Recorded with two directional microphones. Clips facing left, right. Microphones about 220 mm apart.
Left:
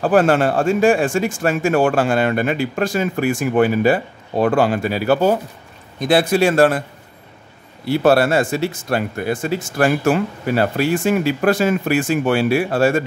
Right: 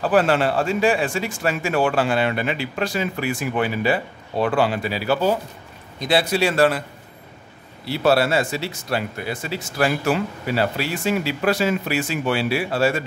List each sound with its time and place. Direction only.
0.0 s speech: 45° left (ahead or behind)
7.8 s speech: 50° left (ahead or behind)